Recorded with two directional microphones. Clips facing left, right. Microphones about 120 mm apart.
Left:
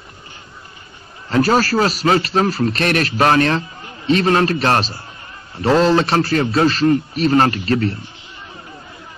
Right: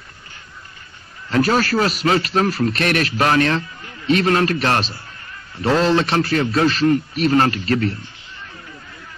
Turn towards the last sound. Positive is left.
turn(degrees=40)  # may be behind; listen again after turning